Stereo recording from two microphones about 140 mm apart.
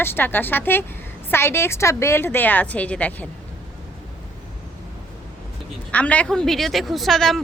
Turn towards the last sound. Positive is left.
turn(degrees=0)  # may be behind; listen again after turning